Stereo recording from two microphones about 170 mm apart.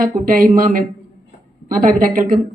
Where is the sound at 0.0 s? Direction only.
55° right (ahead or behind).